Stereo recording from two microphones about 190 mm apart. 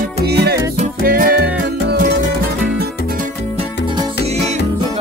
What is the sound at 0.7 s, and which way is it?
Music, 45° right (ahead or behind).